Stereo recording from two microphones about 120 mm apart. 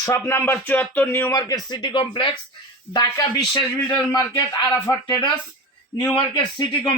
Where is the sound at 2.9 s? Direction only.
35° left (ahead or behind).